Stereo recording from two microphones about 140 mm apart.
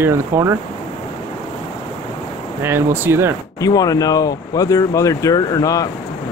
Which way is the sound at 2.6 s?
15° right (ahead or behind).